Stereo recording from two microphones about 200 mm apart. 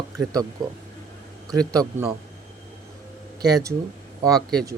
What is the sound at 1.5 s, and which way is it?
Speech, 15° right (ahead or behind).